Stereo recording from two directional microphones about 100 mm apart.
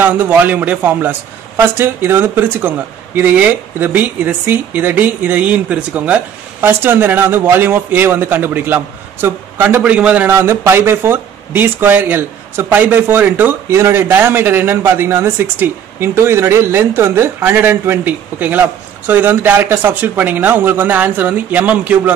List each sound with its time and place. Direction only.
0.0 s speech: 15° right (ahead or behind)
10.3 s speech: 30° right (ahead or behind)